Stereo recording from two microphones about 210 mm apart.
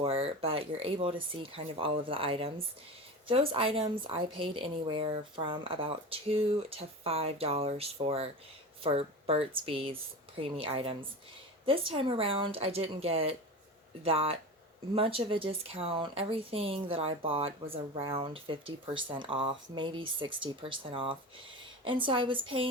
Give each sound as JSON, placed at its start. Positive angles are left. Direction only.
{"t": 0.0, "sound": "speech", "side_deg": -25}